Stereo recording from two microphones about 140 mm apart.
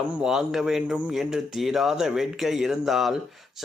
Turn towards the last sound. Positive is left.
turn(degrees=0)  # may be behind; listen again after turning